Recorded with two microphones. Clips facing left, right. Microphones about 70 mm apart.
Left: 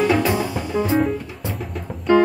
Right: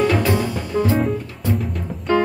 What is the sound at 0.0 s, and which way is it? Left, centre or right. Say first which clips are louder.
Music: even; centre.